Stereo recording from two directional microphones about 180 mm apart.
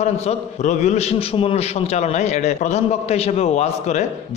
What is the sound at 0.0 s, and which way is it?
A man's voice, 40° left (ahead or behind).